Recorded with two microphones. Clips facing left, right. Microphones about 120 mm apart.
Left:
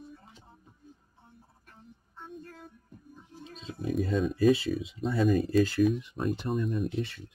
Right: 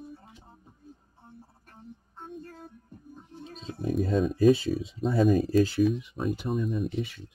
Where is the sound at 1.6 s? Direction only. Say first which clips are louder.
Right 5 dB; 40° right (ahead or behind).